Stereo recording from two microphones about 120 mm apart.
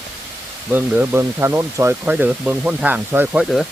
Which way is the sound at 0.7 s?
15° right (ahead or behind).